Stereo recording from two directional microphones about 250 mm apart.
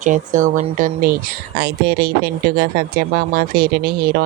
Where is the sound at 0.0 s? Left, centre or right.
Right.